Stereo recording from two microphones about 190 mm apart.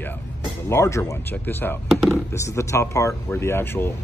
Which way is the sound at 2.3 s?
15° left (ahead or behind).